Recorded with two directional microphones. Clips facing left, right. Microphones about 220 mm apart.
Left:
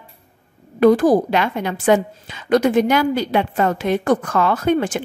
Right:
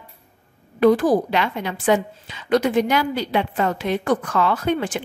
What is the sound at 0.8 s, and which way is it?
A woman's voice, 45° left (ahead or behind).